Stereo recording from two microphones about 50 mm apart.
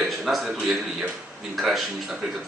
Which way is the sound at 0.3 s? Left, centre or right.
Centre.